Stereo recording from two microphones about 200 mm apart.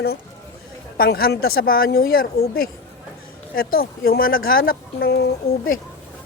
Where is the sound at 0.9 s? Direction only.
50° left (ahead or behind).